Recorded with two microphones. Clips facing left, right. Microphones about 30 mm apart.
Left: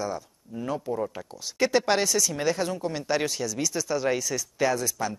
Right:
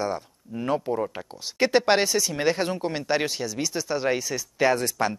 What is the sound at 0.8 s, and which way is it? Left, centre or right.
Speech, centre.